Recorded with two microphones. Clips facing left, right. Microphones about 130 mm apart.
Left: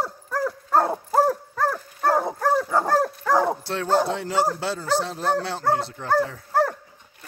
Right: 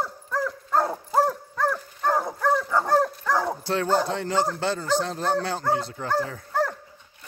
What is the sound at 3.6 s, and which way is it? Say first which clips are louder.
Speech: left 1 dB; centre (ahead or behind).